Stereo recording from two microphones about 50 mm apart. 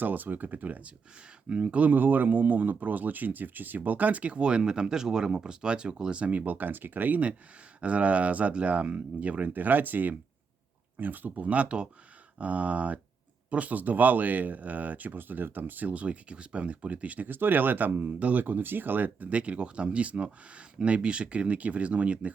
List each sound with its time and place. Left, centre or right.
0.0 s speech: right
1.9 s speech: right
17.2 s speech: right
19.3 s speech: right